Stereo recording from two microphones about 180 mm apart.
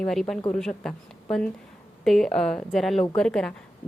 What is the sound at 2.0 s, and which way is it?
A woman's voice, centre (ahead or behind).